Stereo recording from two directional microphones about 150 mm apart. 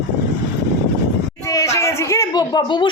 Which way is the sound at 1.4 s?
20° left (ahead or behind).